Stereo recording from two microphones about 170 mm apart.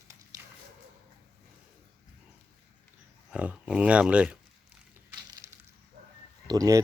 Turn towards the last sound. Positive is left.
turn(degrees=-20)  # may be behind; listen again after turning